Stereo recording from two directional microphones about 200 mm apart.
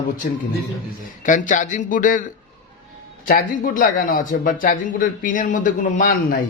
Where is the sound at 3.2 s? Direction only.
45° left (ahead or behind).